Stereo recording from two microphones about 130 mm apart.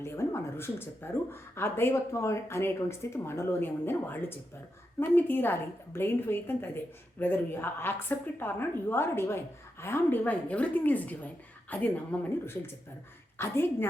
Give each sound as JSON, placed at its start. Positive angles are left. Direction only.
{"t": 0.0, "sound": "a woman's voice", "side_deg": 20}